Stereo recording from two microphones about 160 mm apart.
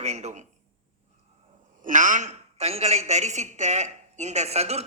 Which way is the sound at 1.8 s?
55° right (ahead or behind).